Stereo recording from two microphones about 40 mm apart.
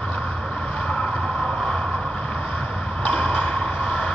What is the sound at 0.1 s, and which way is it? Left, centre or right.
Vehicle, centre.